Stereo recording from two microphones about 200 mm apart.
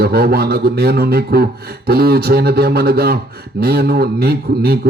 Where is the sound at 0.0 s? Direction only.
50° right (ahead or behind).